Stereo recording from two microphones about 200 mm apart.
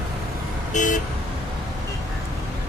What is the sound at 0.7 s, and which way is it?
Vehicle, 40° left (ahead or behind).